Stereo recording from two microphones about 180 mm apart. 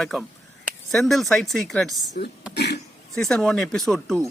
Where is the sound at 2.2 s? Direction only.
50° left (ahead or behind).